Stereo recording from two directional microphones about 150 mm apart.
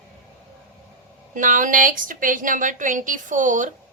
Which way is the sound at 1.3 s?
60° right (ahead or behind).